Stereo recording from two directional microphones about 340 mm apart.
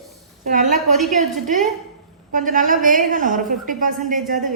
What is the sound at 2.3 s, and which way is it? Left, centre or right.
A woman's voice, right.